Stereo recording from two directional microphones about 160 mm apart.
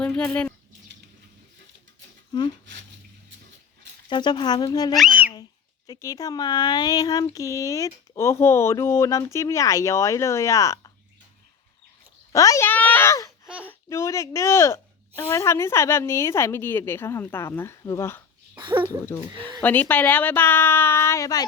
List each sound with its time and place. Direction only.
0.0 s speech: 10° left (ahead or behind)
2.3 s a sound: 25° left (ahead or behind)
4.1 s speech: 30° left (ahead or behind)
4.9 s speech: 10° right (ahead or behind)
5.9 s speech: 20° left (ahead or behind)
12.3 s a child's voice: 20° left (ahead or behind)
13.5 s a sound: 10° right (ahead or behind)
13.9 s speech: 20° left (ahead or behind)